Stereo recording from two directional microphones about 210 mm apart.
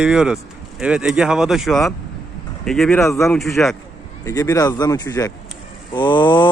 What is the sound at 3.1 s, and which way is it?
Speech, 15° left (ahead or behind).